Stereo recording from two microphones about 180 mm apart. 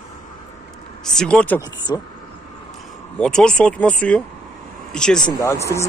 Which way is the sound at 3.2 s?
5° left (ahead or behind).